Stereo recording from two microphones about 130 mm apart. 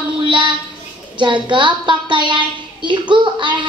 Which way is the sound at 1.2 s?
40° right (ahead or behind).